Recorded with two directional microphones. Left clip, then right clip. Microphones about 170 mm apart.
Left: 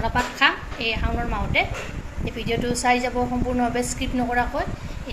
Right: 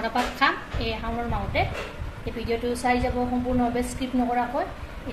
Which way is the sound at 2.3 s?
15° left (ahead or behind).